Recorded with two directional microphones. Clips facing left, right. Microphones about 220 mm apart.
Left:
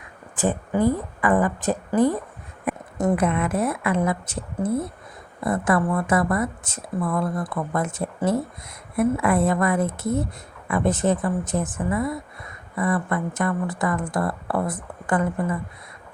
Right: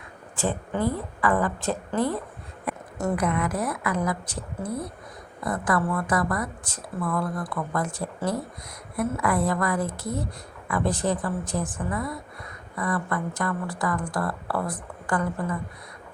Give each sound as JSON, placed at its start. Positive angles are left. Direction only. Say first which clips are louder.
{"t": 0.4, "sound": "a woman's voice", "louder": "left 5 dB", "side_deg": 15}